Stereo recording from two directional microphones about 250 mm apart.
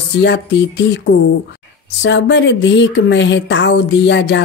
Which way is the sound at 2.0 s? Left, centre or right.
Left.